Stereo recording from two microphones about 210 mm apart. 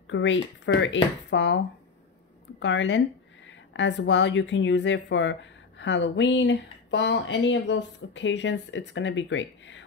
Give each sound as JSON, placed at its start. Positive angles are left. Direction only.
{"t": 0.0, "sound": "speech", "side_deg": 65}
{"t": 2.6, "sound": "speech", "side_deg": 60}